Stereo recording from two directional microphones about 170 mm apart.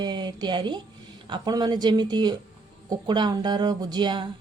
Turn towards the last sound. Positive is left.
turn(degrees=-25)  # may be behind; listen again after turning